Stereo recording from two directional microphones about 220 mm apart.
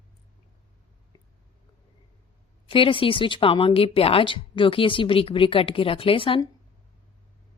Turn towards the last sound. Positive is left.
turn(degrees=25)  # may be behind; listen again after turning